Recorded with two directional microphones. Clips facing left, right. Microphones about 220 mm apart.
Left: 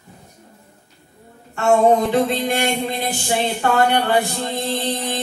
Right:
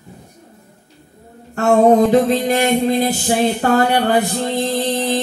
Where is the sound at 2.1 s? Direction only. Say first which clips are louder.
Right 5 dB; 40° right (ahead or behind).